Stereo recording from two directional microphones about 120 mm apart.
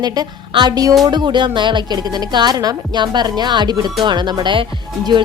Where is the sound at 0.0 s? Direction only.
35° right (ahead or behind).